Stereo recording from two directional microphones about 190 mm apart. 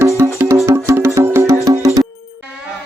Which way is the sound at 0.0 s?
15° right (ahead or behind).